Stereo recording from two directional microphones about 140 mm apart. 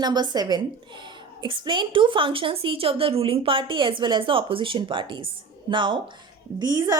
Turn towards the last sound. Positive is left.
turn(degrees=-25)  # may be behind; listen again after turning